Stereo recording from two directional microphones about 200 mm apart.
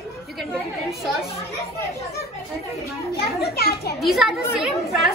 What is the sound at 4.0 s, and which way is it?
Speech, centre (ahead or behind).